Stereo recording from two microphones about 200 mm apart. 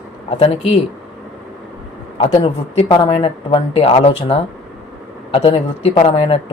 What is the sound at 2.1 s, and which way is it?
Speech, 30° left (ahead or behind).